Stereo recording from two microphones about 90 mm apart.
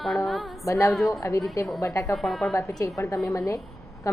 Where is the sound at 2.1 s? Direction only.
5° left (ahead or behind).